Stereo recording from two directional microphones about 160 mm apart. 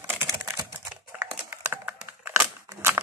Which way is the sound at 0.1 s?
15° right (ahead or behind).